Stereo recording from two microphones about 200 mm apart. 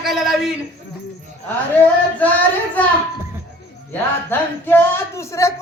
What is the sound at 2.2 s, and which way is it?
Speech, 10° left (ahead or behind).